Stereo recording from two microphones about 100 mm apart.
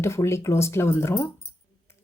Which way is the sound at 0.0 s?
30° left (ahead or behind).